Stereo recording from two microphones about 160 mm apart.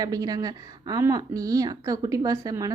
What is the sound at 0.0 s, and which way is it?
A woman's voice, 25° right (ahead or behind).